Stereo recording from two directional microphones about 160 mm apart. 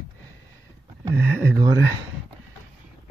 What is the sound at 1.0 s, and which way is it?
Speech, 20° right (ahead or behind).